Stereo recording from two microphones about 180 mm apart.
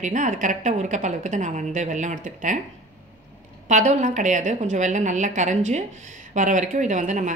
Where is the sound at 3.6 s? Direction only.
40° right (ahead or behind).